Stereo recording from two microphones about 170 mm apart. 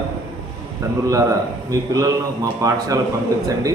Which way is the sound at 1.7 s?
20° right (ahead or behind).